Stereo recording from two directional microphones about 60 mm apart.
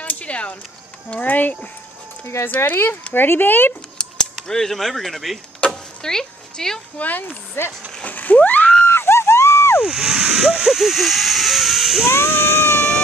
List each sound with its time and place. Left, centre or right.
0.0 s a sound: left
1.2 s speech: left
2.2 s speech: left
4.5 s speech: centre
5.6 s vehicle: centre
7.0 s speech: left
7.6 s speech: left
8.1 s a sound: left
8.8 s a sound: left
9.8 s speech: centre
12.1 s speech: left